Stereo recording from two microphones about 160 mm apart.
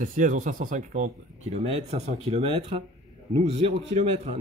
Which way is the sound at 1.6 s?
40° right (ahead or behind).